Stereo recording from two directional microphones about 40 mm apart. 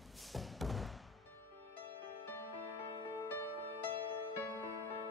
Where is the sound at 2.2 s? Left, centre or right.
Left.